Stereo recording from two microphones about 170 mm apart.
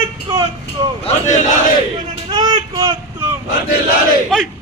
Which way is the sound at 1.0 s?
45° left (ahead or behind).